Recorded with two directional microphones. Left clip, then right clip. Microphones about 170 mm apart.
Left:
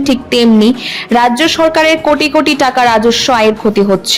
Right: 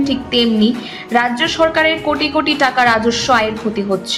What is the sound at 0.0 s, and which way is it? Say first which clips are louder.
A woman's voice: left 5 dB; 55° left (ahead or behind).